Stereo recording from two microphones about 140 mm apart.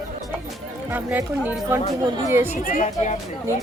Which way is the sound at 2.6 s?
60° left (ahead or behind).